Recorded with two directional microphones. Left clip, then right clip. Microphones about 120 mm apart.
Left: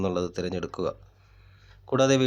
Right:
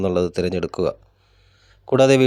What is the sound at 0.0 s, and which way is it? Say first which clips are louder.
Speech: right 8 dB; 50° right (ahead or behind).